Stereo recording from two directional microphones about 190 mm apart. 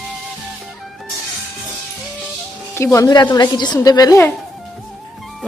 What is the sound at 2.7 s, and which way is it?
A woman's voice, 15° left (ahead or behind).